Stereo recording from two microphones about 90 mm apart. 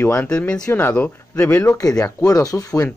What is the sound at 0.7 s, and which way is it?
Speech, 25° left (ahead or behind).